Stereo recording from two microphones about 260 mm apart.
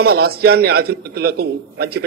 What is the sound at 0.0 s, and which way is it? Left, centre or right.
A man's voice, right.